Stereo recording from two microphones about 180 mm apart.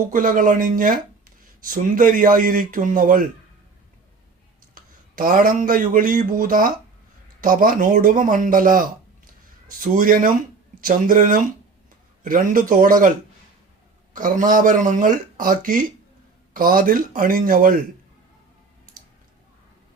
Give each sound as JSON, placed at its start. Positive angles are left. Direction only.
{"t": 0.1, "sound": "speech", "side_deg": -50}
{"t": 4.7, "sound": "a man's voice", "side_deg": -50}